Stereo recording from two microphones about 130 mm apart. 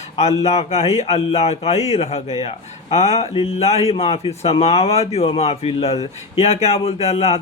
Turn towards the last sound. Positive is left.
turn(degrees=55)  # may be behind; listen again after turning